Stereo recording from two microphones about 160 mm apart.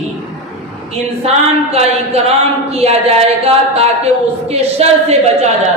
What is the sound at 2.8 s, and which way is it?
A woman's voice, 40° right (ahead or behind).